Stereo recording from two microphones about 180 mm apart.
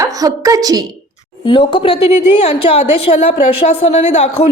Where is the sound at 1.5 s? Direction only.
30° left (ahead or behind).